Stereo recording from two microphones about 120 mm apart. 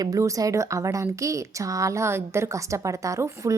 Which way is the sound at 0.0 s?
30° right (ahead or behind).